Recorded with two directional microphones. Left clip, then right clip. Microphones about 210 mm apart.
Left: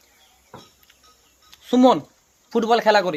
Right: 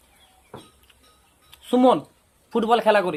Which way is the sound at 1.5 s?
30° left (ahead or behind).